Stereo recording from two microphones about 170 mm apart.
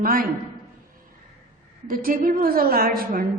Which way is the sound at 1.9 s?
55° right (ahead or behind).